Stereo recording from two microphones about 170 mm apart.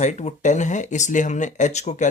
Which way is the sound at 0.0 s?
45° left (ahead or behind).